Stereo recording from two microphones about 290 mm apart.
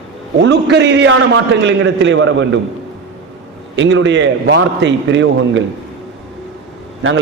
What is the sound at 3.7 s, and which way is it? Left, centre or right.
A man's voice, right.